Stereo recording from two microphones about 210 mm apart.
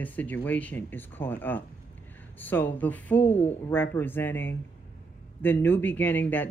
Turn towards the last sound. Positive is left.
turn(degrees=10)  # may be behind; listen again after turning